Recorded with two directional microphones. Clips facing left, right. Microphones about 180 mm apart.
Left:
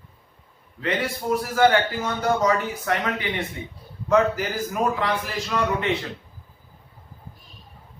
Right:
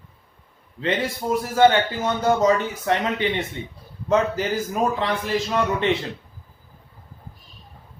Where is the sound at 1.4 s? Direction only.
25° right (ahead or behind).